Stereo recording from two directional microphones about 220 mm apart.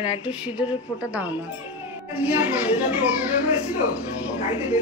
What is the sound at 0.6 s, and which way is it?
A child's voice, 5° right (ahead or behind).